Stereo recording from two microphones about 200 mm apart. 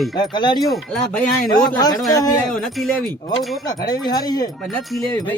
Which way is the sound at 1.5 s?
20° left (ahead or behind).